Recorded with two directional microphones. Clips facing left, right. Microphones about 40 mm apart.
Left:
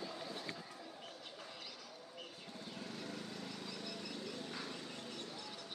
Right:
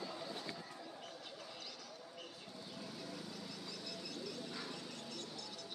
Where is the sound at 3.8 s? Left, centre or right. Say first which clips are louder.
Left 1 dB; left.